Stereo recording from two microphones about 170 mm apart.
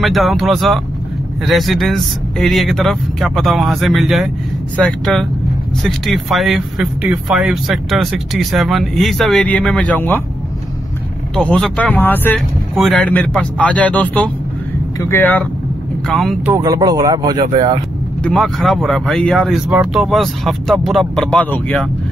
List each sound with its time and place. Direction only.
0.0 s speech: centre (ahead or behind)
11.3 s speech: 5° left (ahead or behind)
16.1 s speech: centre (ahead or behind)
16.5 s a man's voice: 20° right (ahead or behind)
18.2 s speech: centre (ahead or behind)